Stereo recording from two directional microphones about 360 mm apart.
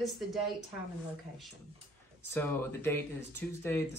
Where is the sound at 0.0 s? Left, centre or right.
Centre.